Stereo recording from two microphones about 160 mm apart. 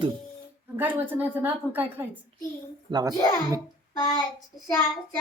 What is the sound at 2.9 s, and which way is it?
Speech, 30° right (ahead or behind).